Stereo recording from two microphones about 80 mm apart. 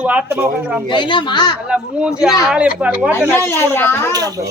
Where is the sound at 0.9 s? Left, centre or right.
Left.